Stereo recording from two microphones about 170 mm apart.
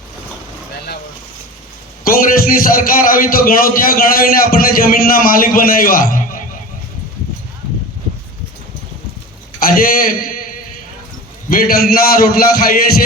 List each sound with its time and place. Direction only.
2.0 s a man's voice: 60° left (ahead or behind)
9.6 s a man's voice: 55° left (ahead or behind)
11.4 s a man's voice: 60° left (ahead or behind)